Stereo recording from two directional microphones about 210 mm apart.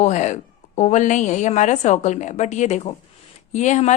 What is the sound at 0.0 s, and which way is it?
A woman's voice, 35° left (ahead or behind).